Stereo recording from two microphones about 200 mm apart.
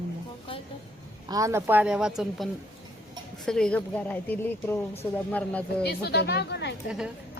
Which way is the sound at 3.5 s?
5° left (ahead or behind).